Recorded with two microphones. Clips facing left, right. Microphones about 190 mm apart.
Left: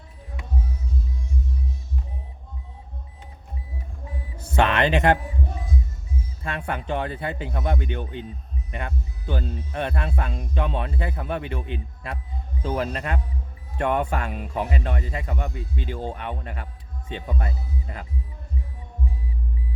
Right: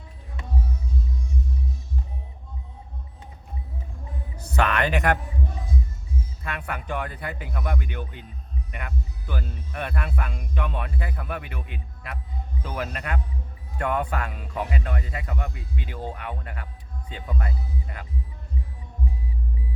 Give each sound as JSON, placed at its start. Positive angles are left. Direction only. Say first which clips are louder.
{"t": 4.5, "sound": "speech", "louder": "left 3 dB", "side_deg": 20}
{"t": 6.4, "sound": "speech", "louder": "left 5 dB", "side_deg": 30}